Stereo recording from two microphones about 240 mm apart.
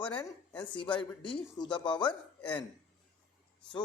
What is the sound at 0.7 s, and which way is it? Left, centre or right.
A man's voice, left.